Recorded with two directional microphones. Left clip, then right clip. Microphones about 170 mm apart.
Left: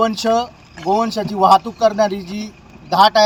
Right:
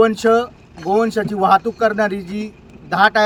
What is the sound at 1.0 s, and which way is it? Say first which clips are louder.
Speech: left 2 dB; 35° right (ahead or behind).